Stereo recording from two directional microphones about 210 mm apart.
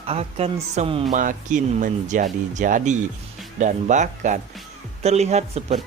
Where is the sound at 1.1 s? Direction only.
40° right (ahead or behind).